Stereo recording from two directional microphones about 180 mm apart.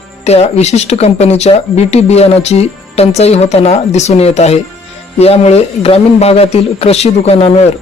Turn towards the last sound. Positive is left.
turn(degrees=35)  # may be behind; listen again after turning